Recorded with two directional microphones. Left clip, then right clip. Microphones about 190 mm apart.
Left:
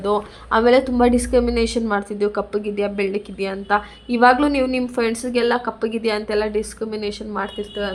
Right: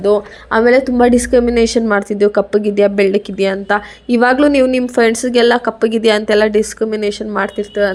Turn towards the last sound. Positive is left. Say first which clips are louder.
# right 10 dB
turn(degrees=-35)  # may be behind; listen again after turning